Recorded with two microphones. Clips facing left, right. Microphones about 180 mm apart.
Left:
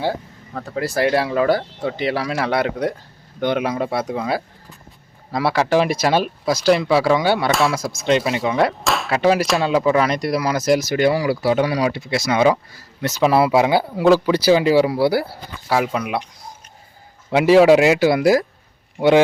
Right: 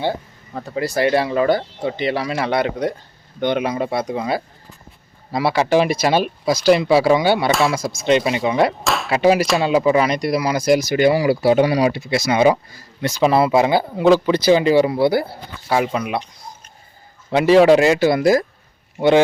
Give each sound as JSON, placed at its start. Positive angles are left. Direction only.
{"t": 0.5, "sound": "speech", "side_deg": -5}
{"t": 11.3, "sound": "speech", "side_deg": -20}
{"t": 11.9, "sound": "speech", "side_deg": -5}
{"t": 17.3, "sound": "speech", "side_deg": 10}
{"t": 19.0, "sound": "speech", "side_deg": 0}